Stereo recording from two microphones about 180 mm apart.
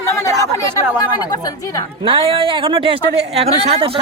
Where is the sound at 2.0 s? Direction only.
30° right (ahead or behind).